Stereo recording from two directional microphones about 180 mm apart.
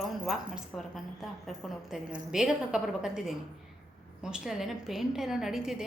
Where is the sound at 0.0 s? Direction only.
Centre (ahead or behind).